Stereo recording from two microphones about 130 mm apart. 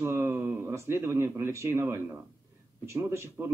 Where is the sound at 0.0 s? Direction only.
20° right (ahead or behind).